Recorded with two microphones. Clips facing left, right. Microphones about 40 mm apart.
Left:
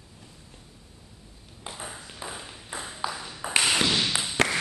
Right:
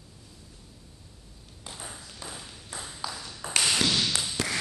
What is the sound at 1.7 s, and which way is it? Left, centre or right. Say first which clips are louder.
Ping: left 2 dB; centre.